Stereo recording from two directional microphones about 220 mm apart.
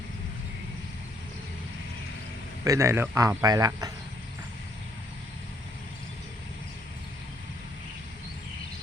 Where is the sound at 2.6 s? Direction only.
15° right (ahead or behind).